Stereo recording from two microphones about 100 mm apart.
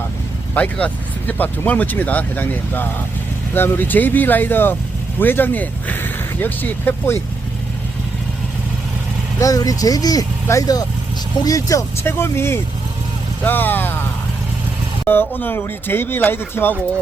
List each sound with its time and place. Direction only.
0.5 s speech: 15° left (ahead or behind)
9.4 s speech: 35° left (ahead or behind)
12.0 s speech: 25° left (ahead or behind)
15.0 s speech: 20° left (ahead or behind)